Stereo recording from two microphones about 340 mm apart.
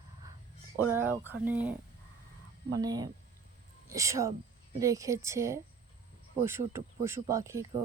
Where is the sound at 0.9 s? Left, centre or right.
Centre.